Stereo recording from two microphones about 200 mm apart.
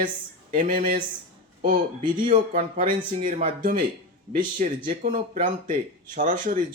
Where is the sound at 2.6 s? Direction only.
40° right (ahead or behind).